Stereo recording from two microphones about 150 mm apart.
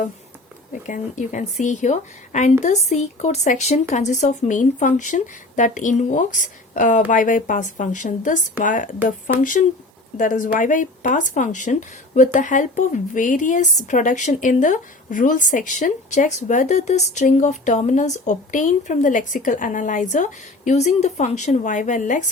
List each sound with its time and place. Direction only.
0.7 s speech: 60° left (ahead or behind)